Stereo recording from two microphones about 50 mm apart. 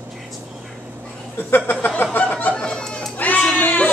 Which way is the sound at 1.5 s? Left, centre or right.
Left.